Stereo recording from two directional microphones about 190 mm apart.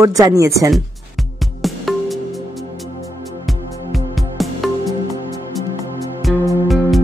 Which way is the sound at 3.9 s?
Centre (ahead or behind).